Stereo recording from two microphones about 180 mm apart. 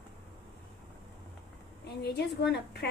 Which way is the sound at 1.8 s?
65° left (ahead or behind).